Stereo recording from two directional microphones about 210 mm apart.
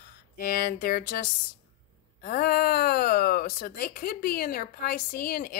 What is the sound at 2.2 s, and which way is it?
Speech, 45° left (ahead or behind).